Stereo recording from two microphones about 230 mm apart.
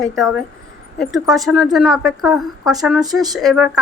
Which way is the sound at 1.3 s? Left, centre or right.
Centre.